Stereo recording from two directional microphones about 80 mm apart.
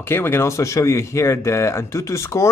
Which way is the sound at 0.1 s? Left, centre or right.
Left.